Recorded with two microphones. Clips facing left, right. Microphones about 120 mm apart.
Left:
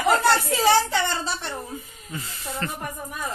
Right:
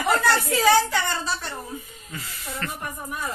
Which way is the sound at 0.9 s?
25° left (ahead or behind).